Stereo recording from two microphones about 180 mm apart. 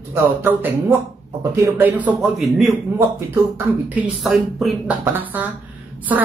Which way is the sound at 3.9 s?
Centre (ahead or behind).